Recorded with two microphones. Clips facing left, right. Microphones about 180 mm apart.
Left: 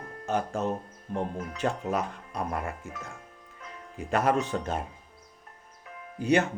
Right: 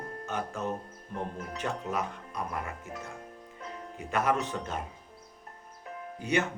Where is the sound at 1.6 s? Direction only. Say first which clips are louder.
Left 5 dB; 45° left (ahead or behind).